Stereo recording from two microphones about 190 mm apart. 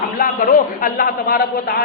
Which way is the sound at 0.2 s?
45° left (ahead or behind).